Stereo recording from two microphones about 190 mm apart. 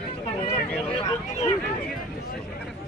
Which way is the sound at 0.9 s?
30° left (ahead or behind).